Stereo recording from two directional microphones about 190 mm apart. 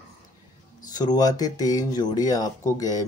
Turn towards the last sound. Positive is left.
turn(degrees=20)  # may be behind; listen again after turning